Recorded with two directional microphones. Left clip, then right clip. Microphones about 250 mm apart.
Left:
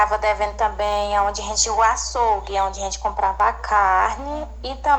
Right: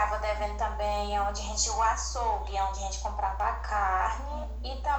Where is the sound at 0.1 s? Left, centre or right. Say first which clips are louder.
Left 11 dB; left.